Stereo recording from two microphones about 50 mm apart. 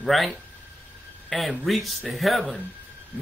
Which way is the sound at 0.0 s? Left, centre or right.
Centre.